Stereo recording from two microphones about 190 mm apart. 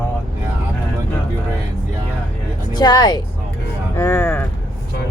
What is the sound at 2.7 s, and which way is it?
Speech, 20° left (ahead or behind).